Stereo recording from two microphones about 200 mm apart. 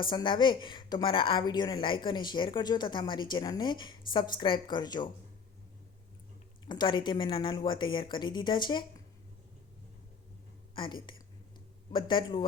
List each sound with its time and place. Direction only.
0.0 s a woman's voice: 25° left (ahead or behind)
6.7 s a woman's voice: 20° left (ahead or behind)
10.8 s a woman's voice: 25° left (ahead or behind)